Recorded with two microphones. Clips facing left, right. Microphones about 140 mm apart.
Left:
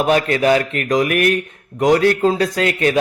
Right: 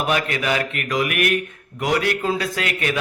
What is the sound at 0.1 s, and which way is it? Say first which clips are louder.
A man's voice: left 9 dB; 35° left (ahead or behind).